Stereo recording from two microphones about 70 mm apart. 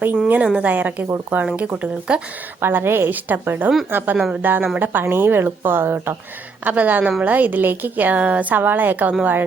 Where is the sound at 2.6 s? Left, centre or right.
Right.